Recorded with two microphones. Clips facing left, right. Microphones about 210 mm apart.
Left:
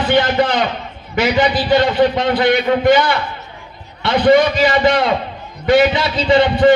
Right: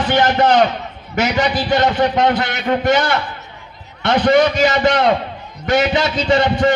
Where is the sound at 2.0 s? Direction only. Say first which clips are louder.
Left 2 dB; 45° right (ahead or behind).